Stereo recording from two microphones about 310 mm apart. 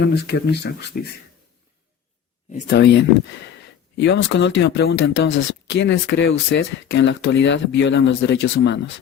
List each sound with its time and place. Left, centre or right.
0.1 s speech: left
2.5 s speech: left